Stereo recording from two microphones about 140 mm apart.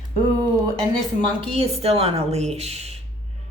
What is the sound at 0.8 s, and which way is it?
A woman's voice, 40° right (ahead or behind).